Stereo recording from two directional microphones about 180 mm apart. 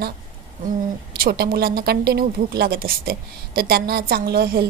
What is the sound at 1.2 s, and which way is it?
Speech, 60° right (ahead or behind).